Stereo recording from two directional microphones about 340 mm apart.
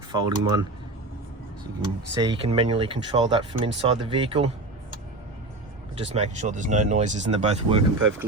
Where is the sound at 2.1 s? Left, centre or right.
Centre.